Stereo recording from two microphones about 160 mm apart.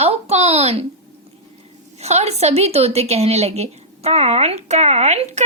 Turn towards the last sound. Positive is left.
turn(degrees=-45)  # may be behind; listen again after turning